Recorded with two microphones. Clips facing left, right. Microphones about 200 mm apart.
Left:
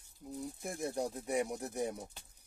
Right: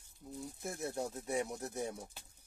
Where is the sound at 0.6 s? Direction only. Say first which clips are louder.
Left 2 dB; 15° left (ahead or behind).